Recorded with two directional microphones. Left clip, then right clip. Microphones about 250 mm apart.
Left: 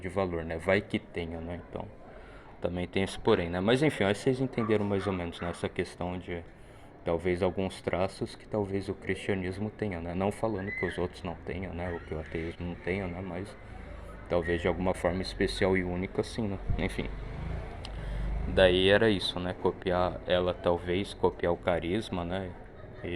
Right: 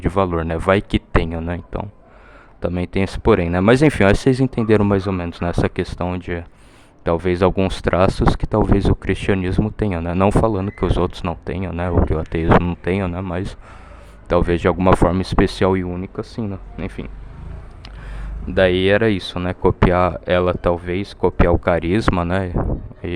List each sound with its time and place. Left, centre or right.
0.0 s speech: right
18.9 s speech: right